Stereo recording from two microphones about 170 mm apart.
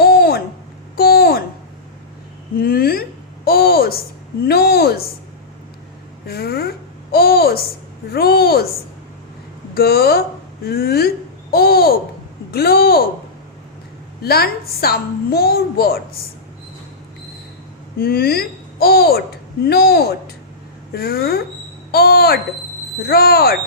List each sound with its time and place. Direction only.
0.0 s a sound: 65° left (ahead or behind)
2.6 s a sound: 65° left (ahead or behind)
4.4 s a woman's voice: 65° left (ahead or behind)
6.2 s a child's voice: 65° left (ahead or behind)
9.7 s a woman's voice: 65° left (ahead or behind)
14.2 s a woman's voice: 65° left (ahead or behind)
18.0 s a woman's voice: 65° left (ahead or behind)